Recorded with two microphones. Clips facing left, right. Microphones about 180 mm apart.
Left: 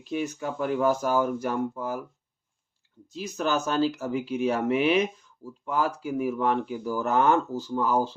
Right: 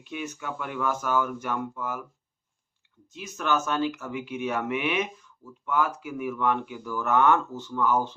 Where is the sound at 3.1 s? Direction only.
35° left (ahead or behind).